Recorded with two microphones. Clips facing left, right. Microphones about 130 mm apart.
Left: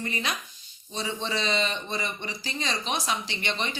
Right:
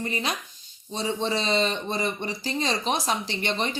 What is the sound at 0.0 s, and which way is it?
Speech, 35° right (ahead or behind).